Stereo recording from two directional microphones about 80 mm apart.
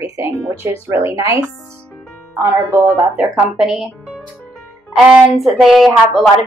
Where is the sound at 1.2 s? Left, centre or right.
Right.